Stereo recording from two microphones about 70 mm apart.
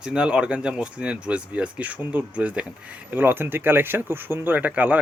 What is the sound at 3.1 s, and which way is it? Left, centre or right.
Speech, right.